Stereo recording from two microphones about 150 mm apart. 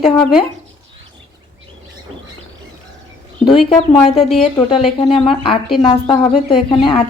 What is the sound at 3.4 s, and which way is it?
A woman's voice, 35° left (ahead or behind).